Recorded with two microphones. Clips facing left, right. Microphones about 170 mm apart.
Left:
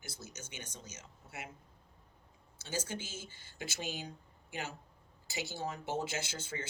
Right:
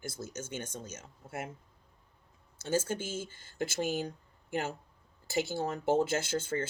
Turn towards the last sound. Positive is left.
turn(degrees=-55)  # may be behind; listen again after turning